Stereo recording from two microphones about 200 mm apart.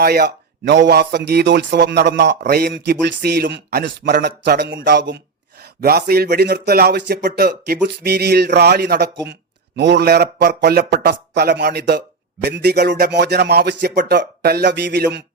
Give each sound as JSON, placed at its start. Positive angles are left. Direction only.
{"t": 0.0, "sound": "speech", "side_deg": -50}